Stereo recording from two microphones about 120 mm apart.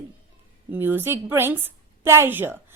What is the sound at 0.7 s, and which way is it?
A woman's voice, 15° right (ahead or behind).